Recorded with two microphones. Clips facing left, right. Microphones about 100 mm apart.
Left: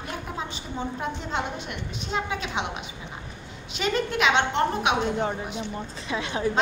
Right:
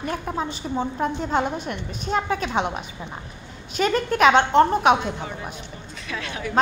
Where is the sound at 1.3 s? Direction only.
45° right (ahead or behind).